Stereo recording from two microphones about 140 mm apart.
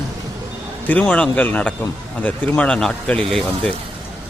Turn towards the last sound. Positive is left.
turn(degrees=5)  # may be behind; listen again after turning